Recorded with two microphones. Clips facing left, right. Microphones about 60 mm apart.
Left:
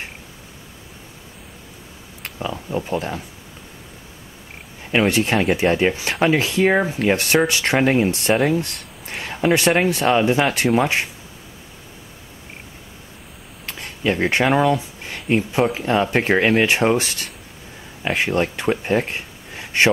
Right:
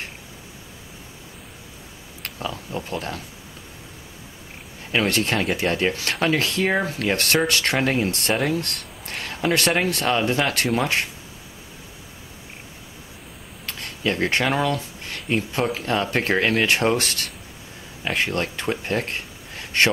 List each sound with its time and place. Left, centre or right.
2.2 s speech: centre
4.9 s speech: centre
9.0 s a sound: centre
9.7 s speech: centre
13.7 s a sound: centre
15.2 s speech: centre